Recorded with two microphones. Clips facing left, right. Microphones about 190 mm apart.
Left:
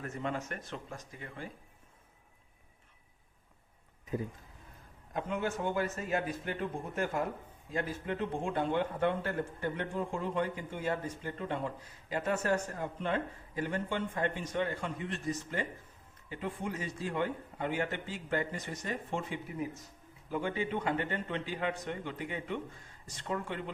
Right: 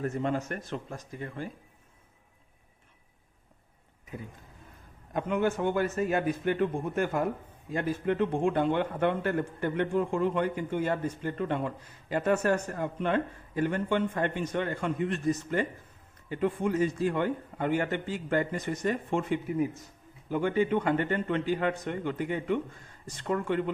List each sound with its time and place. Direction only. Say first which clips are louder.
0.0 s speech: right 7 dB; 35° right (ahead or behind)
4.1 s speech: left 6 dB; 35° left (ahead or behind)
5.1 s a man's voice: right 6 dB; 60° right (ahead or behind)